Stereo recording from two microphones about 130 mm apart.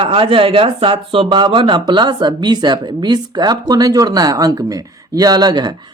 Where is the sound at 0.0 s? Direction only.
45° right (ahead or behind).